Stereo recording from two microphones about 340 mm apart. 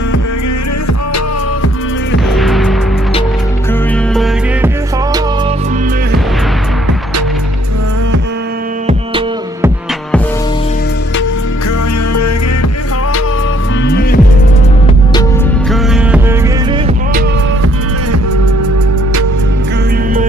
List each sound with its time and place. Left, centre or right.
2.3 s music: centre
4.1 s music: centre
8.8 s music: centre
13.8 s music: left
15.7 s music: centre